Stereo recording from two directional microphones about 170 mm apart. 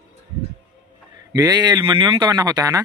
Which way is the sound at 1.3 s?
20° right (ahead or behind).